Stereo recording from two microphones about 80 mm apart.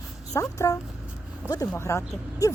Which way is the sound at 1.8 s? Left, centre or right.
Left.